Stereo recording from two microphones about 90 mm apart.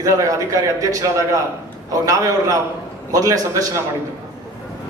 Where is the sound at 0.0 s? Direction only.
35° right (ahead or behind).